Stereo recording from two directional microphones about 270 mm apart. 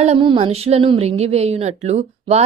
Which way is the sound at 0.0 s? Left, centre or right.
Right.